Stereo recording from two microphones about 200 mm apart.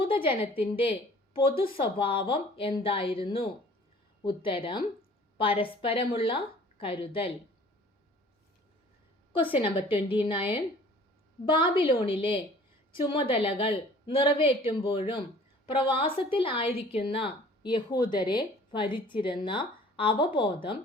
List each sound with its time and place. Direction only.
0.0 s a woman's voice: 25° left (ahead or behind)
9.3 s a woman's voice: 25° left (ahead or behind)